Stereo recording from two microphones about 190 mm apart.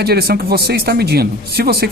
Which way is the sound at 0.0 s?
55° right (ahead or behind).